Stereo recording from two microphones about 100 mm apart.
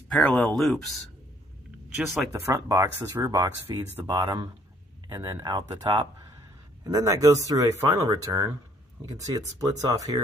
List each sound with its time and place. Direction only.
0.2 s speech: 20° left (ahead or behind)
0.6 s speech: centre (ahead or behind)
2.5 s speech: 40° right (ahead or behind)
3.0 s speech: 25° right (ahead or behind)
4.2 s speech: 50° right (ahead or behind)
5.0 s a sound: 50° right (ahead or behind)
5.4 s speech: 50° right (ahead or behind)
6.8 s speech: 35° right (ahead or behind)